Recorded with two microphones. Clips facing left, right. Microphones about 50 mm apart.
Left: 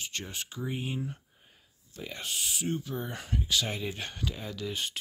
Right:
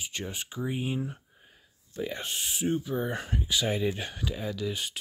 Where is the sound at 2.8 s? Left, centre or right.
Centre.